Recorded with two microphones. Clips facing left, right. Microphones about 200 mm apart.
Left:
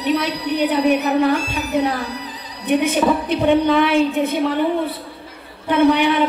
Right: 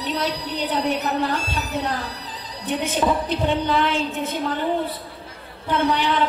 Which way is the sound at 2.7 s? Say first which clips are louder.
Left 6 dB; 65° left (ahead or behind).